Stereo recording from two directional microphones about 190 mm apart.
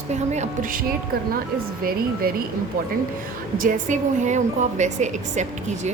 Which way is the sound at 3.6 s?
40° right (ahead or behind).